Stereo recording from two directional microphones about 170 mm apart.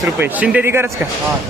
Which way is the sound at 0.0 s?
10° right (ahead or behind).